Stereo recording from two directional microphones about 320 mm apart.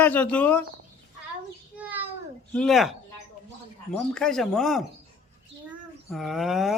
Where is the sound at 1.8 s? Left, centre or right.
Centre.